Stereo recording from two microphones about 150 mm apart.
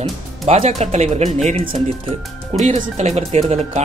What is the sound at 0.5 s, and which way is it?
Speech, 45° right (ahead or behind).